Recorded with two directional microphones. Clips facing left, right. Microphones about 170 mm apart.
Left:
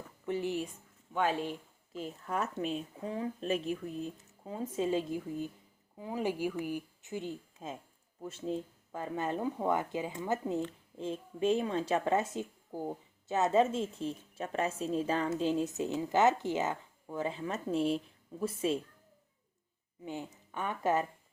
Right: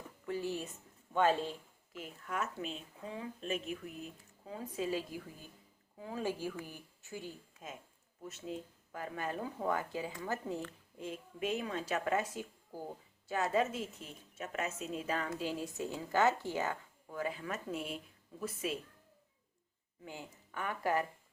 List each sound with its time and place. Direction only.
0.3 s speech: 20° left (ahead or behind)
1.9 s a woman's voice: 30° left (ahead or behind)
20.1 s a woman's voice: 20° left (ahead or behind)